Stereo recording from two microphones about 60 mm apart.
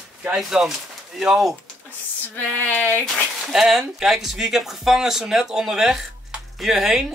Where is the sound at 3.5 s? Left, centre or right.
Centre.